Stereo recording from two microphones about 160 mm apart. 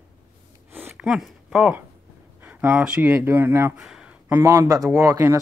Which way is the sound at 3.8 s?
5° right (ahead or behind).